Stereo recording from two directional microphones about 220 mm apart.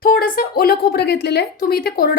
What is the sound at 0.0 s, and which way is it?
A woman's voice, 40° left (ahead or behind).